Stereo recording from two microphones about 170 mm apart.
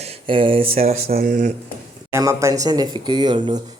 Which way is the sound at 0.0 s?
35° right (ahead or behind).